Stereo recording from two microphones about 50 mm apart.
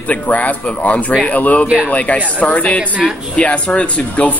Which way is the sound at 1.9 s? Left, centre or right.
Left.